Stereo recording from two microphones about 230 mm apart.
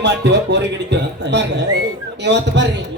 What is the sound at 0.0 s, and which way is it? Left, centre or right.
A man's voice, right.